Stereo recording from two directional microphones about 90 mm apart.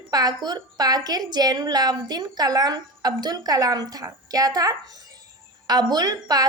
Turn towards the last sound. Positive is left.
turn(degrees=-45)  # may be behind; listen again after turning